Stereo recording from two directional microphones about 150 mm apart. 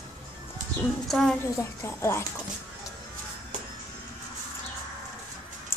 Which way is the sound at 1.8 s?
15° left (ahead or behind).